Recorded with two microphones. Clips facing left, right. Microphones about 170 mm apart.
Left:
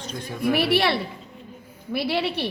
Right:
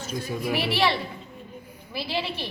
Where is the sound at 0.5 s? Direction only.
65° left (ahead or behind).